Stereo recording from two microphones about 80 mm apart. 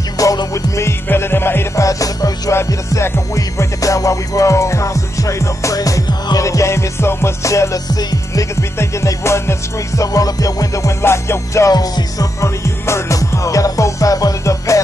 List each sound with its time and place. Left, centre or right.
0.2 s music: left
1.0 s music: left
1.8 s music: left
2.5 s music: left
11.7 s music: left